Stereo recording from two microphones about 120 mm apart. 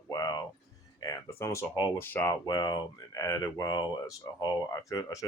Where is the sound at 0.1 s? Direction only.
35° left (ahead or behind).